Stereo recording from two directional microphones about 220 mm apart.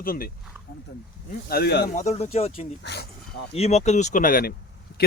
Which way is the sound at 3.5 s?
30° left (ahead or behind).